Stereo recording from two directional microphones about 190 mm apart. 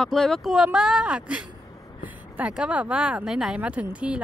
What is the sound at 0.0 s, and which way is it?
Speech, centre (ahead or behind).